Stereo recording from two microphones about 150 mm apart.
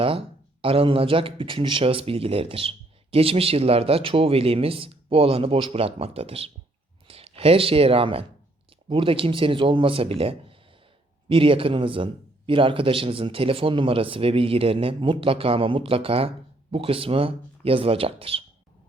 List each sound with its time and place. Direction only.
0.0 s speech: 35° right (ahead or behind)